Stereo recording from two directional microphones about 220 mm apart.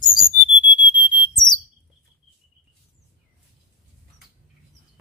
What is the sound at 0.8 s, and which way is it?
Chirp tone, 20° left (ahead or behind).